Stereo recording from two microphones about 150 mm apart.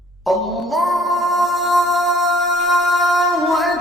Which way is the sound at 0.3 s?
Centre (ahead or behind).